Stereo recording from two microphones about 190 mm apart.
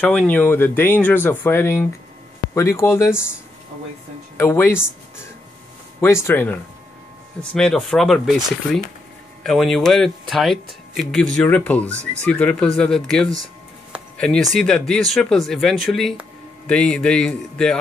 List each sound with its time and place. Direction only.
0.0 s speech: 10° left (ahead or behind)
4.4 s speech: 10° left (ahead or behind)
5.9 s speech: 15° left (ahead or behind)
7.5 s speech: 5° left (ahead or behind)
9.4 s speech: centre (ahead or behind)